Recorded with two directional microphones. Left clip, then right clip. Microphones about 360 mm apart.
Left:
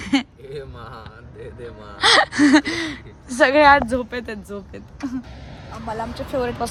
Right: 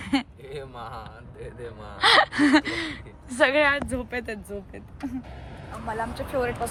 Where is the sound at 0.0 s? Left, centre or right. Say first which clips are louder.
Left 5 dB; centre.